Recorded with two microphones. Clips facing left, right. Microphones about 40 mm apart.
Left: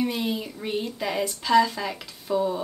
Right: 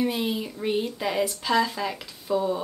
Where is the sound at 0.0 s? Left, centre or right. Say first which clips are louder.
Right 1 dB; centre.